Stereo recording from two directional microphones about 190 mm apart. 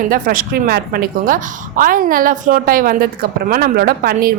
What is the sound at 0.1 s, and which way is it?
A woman's voice, 50° right (ahead or behind).